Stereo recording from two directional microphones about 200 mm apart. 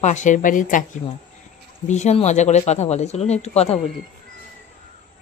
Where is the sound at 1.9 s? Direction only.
35° left (ahead or behind).